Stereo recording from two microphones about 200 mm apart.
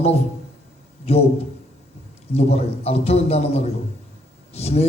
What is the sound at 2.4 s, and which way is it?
Speech, 30° left (ahead or behind).